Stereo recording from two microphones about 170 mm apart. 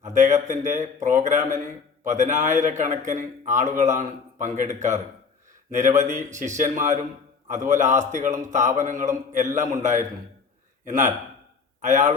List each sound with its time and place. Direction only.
0.0 s a man's voice: 45° right (ahead or behind)